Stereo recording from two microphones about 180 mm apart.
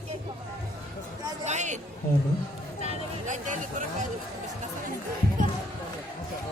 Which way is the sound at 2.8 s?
45° right (ahead or behind).